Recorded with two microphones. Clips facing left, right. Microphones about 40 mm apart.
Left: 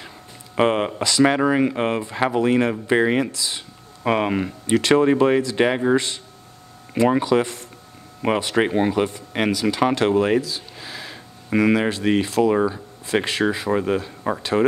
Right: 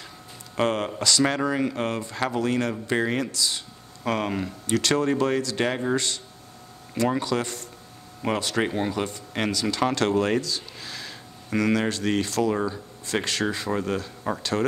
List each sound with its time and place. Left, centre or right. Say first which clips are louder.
0.6 s speech: left 5 dB; left